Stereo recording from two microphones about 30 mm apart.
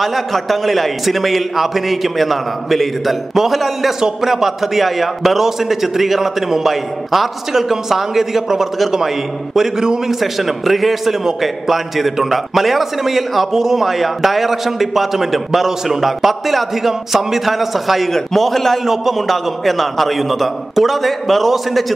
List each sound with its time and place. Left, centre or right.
0.0 s a man's voice: centre
10.2 s a man's voice: centre